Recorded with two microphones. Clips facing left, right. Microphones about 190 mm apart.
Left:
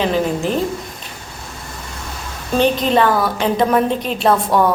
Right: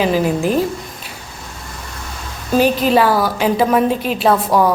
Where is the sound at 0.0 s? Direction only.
10° right (ahead or behind).